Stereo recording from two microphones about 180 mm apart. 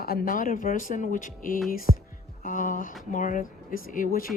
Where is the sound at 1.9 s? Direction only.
35° right (ahead or behind).